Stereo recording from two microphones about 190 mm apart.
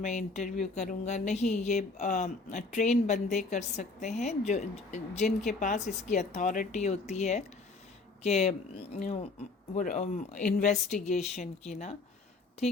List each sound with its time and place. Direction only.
0.0 s speech: 40° left (ahead or behind)